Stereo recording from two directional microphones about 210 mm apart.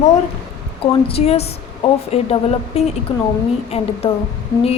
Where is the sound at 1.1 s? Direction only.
30° left (ahead or behind).